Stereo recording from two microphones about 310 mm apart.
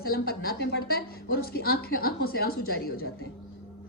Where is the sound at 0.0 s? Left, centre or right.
Left.